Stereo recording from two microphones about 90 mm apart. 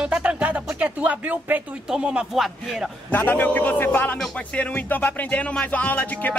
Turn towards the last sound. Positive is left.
turn(degrees=20)  # may be behind; listen again after turning